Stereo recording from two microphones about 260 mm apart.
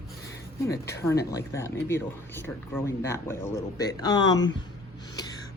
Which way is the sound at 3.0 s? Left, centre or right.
Centre.